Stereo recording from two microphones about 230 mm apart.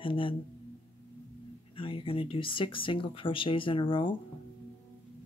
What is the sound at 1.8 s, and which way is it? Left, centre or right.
Speech, left.